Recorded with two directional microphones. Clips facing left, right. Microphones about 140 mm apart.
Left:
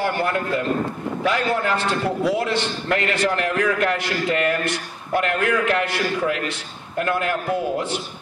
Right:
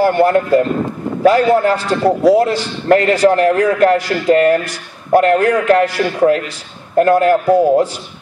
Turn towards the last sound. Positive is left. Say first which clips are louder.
# right 12 dB
turn(degrees=-40)  # may be behind; listen again after turning